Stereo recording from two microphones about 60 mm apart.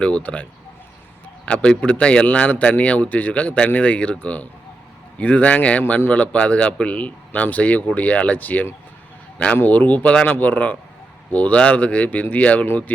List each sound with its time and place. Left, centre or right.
0.0 s speech: left
1.5 s speech: centre
9.6 s speech: left
12.6 s speech: left